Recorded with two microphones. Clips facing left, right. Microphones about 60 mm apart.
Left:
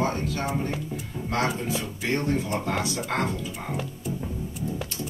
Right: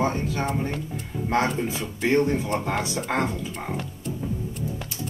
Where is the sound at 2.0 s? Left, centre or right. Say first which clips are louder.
Right 5 dB; right.